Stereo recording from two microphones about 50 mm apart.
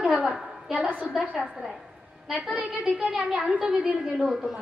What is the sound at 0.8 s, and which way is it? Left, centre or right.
Speech, right.